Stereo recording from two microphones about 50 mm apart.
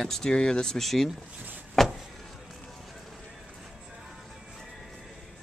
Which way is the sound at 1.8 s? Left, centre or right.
Centre.